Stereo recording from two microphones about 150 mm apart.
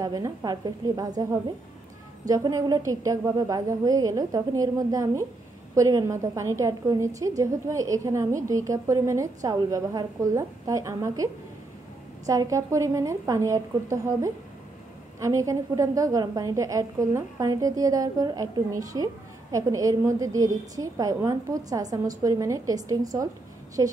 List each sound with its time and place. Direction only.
0.0 s a woman's voice: 25° right (ahead or behind)
12.3 s a woman's voice: 20° right (ahead or behind)